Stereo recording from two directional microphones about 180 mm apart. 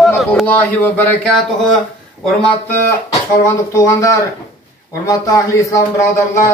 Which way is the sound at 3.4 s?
15° left (ahead or behind).